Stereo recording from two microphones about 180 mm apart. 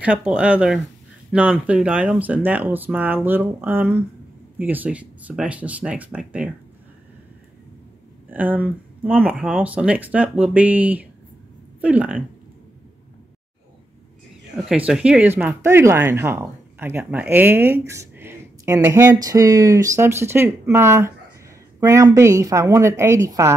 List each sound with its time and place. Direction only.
0.0 s speech: 5° right (ahead or behind)
8.3 s speech: 10° right (ahead or behind)
14.7 s speech: 5° right (ahead or behind)